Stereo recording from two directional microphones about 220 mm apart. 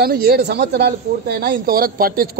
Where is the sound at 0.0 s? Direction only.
45° right (ahead or behind).